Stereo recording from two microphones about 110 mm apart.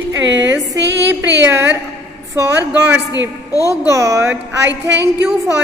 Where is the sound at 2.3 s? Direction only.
20° right (ahead or behind).